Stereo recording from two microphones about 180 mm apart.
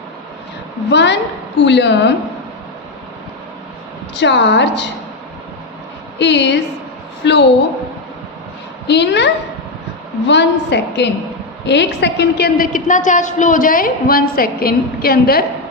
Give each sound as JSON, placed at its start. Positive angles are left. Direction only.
{"t": 0.9, "sound": "a woman's voice", "side_deg": 75}
{"t": 4.1, "sound": "a woman's voice", "side_deg": 75}
{"t": 6.1, "sound": "a woman's voice", "side_deg": 75}
{"t": 8.9, "sound": "a woman's voice", "side_deg": 75}